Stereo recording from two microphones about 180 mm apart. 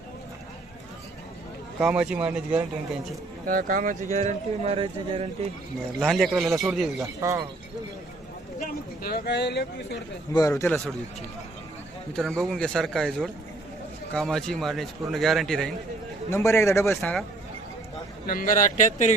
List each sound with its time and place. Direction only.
1.8 s speech: 5° right (ahead or behind)
3.4 s speech: 50° right (ahead or behind); by 5.5 s 35° right (ahead or behind)
6.0 s a man's voice: centre (ahead or behind)
7.0 s speech: 20° right (ahead or behind)
8.5 s speech: 55° left (ahead or behind)
10.5 s a man's voice: 5° left (ahead or behind)
12.1 s a man's voice: 5° left (ahead or behind)
16.3 s a man's voice: 15° left (ahead or behind)
17.0 s a man's voice: centre (ahead or behind)
18.3 s speech: 50° left (ahead or behind)